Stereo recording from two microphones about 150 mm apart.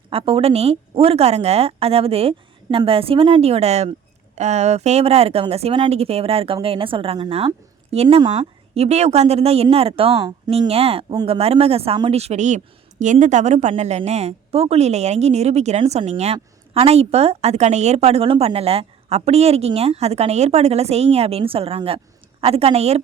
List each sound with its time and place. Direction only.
0.1 s speech: 40° right (ahead or behind)
10.2 s speech: 25° right (ahead or behind)
10.6 s a woman's voice: 40° right (ahead or behind)